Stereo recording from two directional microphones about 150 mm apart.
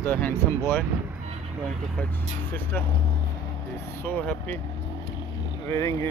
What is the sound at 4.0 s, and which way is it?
Speech, 10° left (ahead or behind).